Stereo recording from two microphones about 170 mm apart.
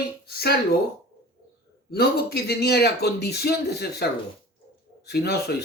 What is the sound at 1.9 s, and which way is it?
Speech, 70° left (ahead or behind).